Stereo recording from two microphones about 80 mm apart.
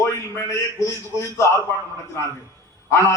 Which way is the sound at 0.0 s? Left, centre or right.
Left.